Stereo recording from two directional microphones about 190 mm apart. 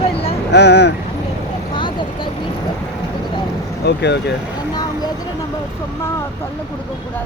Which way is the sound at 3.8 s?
60° left (ahead or behind).